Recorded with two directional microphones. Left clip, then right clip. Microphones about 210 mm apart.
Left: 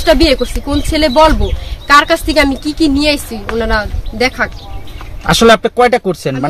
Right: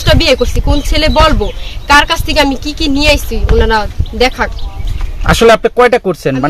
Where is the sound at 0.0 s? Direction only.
Centre (ahead or behind).